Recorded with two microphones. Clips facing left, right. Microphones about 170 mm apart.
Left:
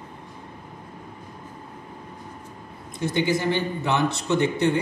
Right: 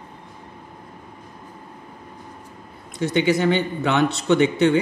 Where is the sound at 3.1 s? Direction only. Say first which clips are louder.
Right 4 dB; 75° right (ahead or behind).